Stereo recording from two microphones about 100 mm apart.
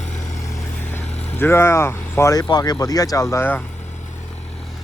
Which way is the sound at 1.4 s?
25° left (ahead or behind).